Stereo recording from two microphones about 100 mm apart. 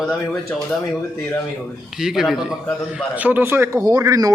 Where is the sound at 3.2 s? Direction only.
15° right (ahead or behind); by 4.3 s 35° right (ahead or behind).